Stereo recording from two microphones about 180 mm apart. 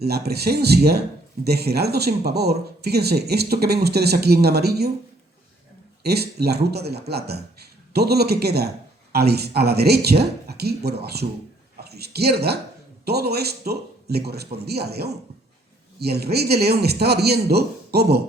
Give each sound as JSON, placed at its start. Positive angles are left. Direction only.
{"t": 0.0, "sound": "speech", "side_deg": -60}
{"t": 6.0, "sound": "speech", "side_deg": -60}